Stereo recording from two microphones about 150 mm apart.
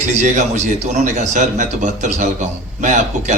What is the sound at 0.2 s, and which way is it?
A man's voice, 50° right (ahead or behind).